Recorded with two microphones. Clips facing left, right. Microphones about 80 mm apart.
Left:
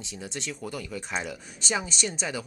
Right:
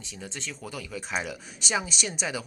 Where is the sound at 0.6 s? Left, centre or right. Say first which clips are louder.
Left 2 dB; centre.